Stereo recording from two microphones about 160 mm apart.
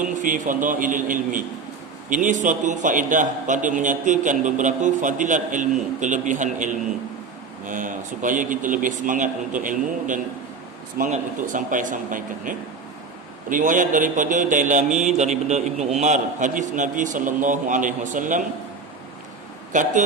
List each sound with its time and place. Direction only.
0.0 s a man's voice: 55° right (ahead or behind)
19.7 s a man's voice: 50° right (ahead or behind)